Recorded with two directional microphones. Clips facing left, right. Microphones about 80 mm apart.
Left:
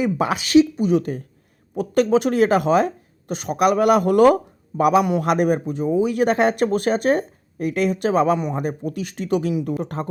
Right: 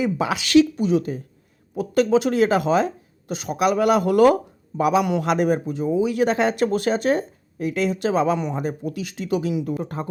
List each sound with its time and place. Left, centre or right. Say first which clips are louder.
0.0 s speech: left 2 dB; left
0.5 s speech: left 1 dB; left
0.9 s a man's voice: left 1 dB; left
4.8 s a man's voice: left 3 dB; left